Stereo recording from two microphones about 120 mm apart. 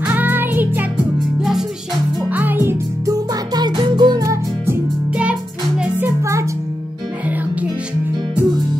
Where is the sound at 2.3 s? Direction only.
15° right (ahead or behind).